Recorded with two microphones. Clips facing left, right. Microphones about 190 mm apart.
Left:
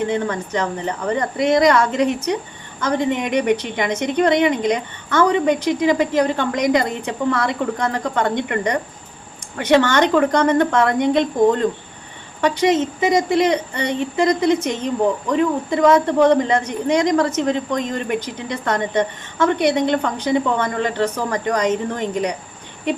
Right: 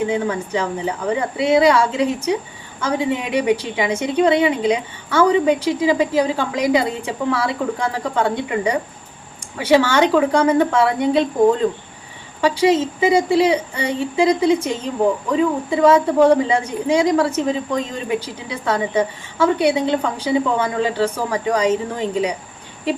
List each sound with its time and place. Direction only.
0.0 s speech: 10° right (ahead or behind)